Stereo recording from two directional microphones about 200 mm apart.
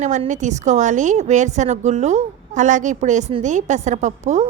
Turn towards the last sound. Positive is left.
turn(degrees=-35)  # may be behind; listen again after turning